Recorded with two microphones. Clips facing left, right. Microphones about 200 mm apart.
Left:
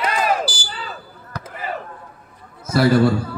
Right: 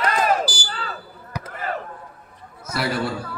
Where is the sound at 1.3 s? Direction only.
15° right (ahead or behind).